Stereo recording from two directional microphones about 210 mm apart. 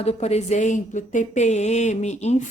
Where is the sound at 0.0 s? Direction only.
30° left (ahead or behind).